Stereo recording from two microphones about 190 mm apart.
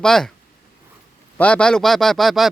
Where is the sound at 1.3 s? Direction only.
5° left (ahead or behind).